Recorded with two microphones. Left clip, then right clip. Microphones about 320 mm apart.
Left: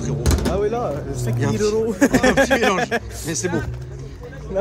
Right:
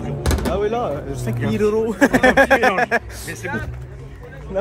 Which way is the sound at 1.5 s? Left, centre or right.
Right.